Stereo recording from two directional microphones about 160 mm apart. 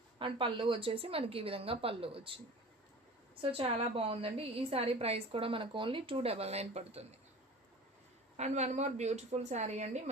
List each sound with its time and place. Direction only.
0.2 s a woman's voice: 35° right (ahead or behind)
3.4 s a woman's voice: 35° right (ahead or behind)
8.4 s a woman's voice: 45° right (ahead or behind)